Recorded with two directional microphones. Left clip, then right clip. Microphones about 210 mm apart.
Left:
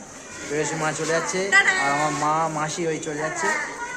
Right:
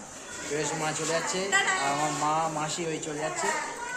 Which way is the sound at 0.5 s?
10° left (ahead or behind).